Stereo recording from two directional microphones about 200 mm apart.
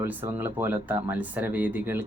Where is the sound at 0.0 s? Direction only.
10° right (ahead or behind).